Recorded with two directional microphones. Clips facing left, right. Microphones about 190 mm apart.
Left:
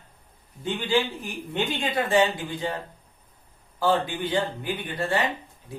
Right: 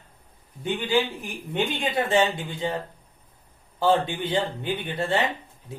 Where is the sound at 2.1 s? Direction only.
25° right (ahead or behind).